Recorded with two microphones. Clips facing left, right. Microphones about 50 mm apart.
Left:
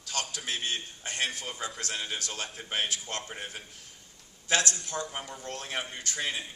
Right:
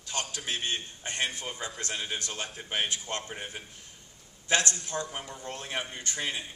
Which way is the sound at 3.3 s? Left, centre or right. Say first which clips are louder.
Even; centre.